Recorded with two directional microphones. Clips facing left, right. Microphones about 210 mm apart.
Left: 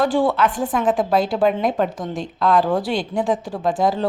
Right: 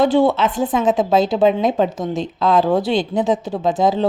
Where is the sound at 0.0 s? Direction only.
20° right (ahead or behind).